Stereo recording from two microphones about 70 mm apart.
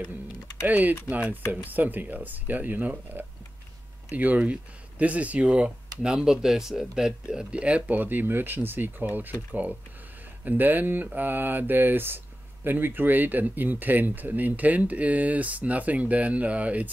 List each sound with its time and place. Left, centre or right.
0.7 s speech: right